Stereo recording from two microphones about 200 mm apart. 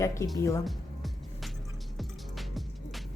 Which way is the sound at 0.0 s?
15° left (ahead or behind).